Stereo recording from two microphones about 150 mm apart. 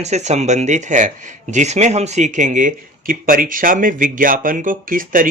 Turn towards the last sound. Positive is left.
turn(degrees=-65)  # may be behind; listen again after turning